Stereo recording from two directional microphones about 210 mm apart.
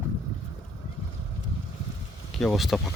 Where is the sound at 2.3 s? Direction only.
Centre (ahead or behind).